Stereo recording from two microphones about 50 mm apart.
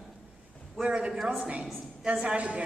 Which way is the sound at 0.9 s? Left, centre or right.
Centre.